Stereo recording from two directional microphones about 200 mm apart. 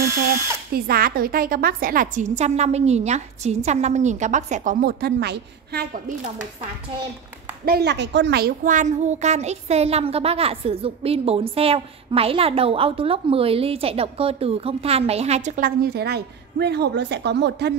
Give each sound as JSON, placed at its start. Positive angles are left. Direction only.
{"t": 0.7, "sound": "a woman's voice", "side_deg": -50}
{"t": 7.6, "sound": "a woman's voice", "side_deg": -55}